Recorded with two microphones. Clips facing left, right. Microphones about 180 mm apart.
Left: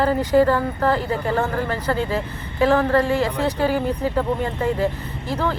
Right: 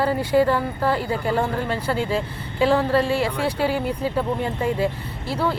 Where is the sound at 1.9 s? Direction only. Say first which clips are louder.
Even; 20° left (ahead or behind).